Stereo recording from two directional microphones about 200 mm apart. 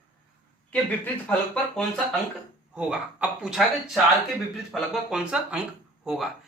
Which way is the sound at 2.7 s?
5° right (ahead or behind).